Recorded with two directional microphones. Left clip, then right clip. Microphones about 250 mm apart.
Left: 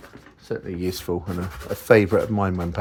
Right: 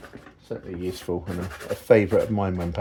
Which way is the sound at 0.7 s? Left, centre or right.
Centre.